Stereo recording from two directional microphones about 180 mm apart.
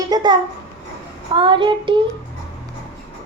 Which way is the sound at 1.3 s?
25° right (ahead or behind).